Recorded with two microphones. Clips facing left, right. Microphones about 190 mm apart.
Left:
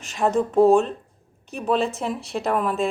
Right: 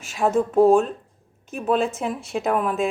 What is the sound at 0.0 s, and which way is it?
A woman's voice, 5° right (ahead or behind).